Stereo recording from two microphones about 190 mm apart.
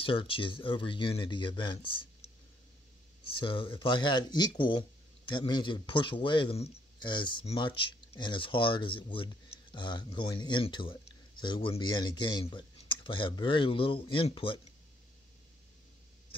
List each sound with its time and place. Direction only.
0.0 s speech: 30° left (ahead or behind)
3.3 s speech: 25° left (ahead or behind)